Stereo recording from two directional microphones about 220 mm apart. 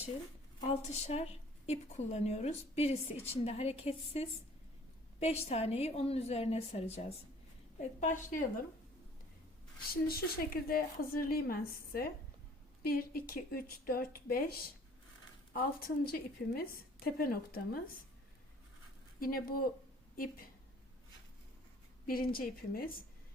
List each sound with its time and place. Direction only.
0.7 s a woman's voice: 30° left (ahead or behind)
9.9 s a woman's voice: 40° left (ahead or behind)
16.0 s speech: 45° left (ahead or behind)
19.2 s speech: 40° left (ahead or behind)
22.0 s speech: 40° left (ahead or behind)